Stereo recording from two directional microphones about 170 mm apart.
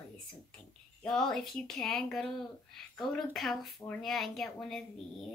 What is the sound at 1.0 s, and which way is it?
Speech, 5° left (ahead or behind).